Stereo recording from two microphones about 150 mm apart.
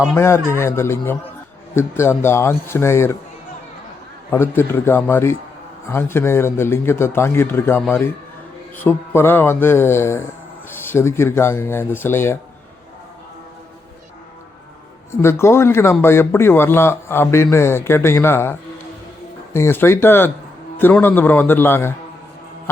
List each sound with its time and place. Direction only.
0.2 s a man's voice: 15° left (ahead or behind)
4.3 s a man's voice: 15° left (ahead or behind)
15.2 s a man's voice: 20° left (ahead or behind)
19.5 s a man's voice: 15° left (ahead or behind)